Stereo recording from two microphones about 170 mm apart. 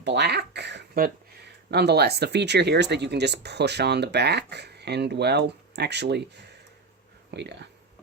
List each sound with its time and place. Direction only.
0.0 s speech: 80° right